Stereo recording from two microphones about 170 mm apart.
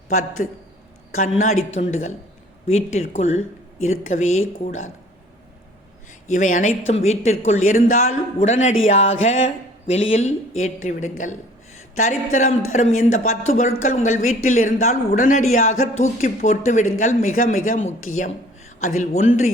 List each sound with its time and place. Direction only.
0.4 s speech: 50° left (ahead or behind)
6.3 s speech: 45° left (ahead or behind)
9.0 s music: 90° left
9.8 s speech: 40° left (ahead or behind)